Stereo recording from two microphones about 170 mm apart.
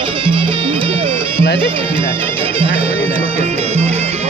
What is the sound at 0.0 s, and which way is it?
Music, 30° right (ahead or behind).